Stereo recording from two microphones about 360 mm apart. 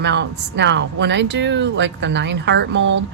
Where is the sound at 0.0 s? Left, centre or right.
Right.